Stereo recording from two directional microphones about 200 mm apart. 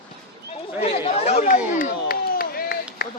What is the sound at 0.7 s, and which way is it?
Speech, 30° left (ahead or behind).